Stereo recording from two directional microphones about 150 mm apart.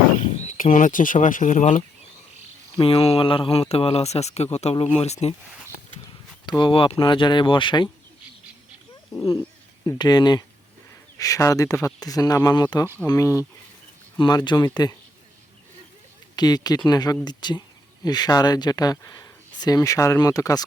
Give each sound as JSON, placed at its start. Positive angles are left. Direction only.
{"t": 0.3, "sound": "speech", "side_deg": 60}
{"t": 2.8, "sound": "speech", "side_deg": 40}
{"t": 6.6, "sound": "speech", "side_deg": 35}
{"t": 9.8, "sound": "speech", "side_deg": 25}
{"t": 16.3, "sound": "speech", "side_deg": 25}